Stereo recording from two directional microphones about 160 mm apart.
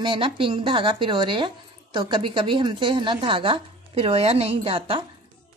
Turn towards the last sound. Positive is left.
turn(degrees=-35)  # may be behind; listen again after turning